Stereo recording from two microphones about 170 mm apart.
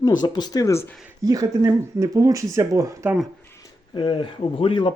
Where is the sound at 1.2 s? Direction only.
20° right (ahead or behind).